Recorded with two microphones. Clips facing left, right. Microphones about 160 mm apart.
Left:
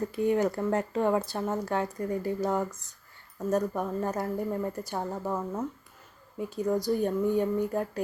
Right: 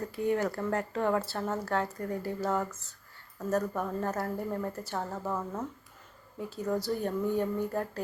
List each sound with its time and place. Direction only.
0.2 s speech: 20° left (ahead or behind)
6.7 s speech: 15° left (ahead or behind)